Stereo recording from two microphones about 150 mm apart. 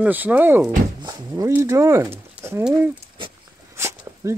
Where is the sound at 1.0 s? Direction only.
20° right (ahead or behind).